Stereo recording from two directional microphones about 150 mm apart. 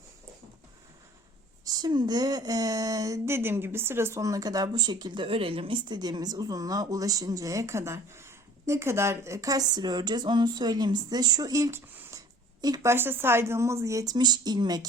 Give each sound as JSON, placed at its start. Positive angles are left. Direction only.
{"t": 1.6, "sound": "speech", "side_deg": -25}